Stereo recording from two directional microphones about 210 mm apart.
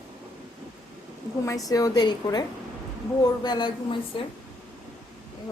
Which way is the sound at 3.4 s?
20° left (ahead or behind).